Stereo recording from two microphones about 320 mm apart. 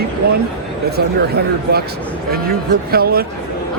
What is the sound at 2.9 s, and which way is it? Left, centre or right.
Speech, right.